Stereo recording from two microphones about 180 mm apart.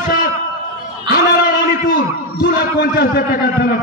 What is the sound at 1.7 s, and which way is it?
A man's voice, 50° left (ahead or behind).